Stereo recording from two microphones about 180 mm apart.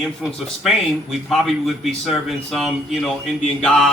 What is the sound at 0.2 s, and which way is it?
A man's voice, centre (ahead or behind).